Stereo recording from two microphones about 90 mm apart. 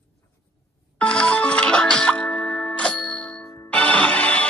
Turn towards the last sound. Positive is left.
turn(degrees=15)  # may be behind; listen again after turning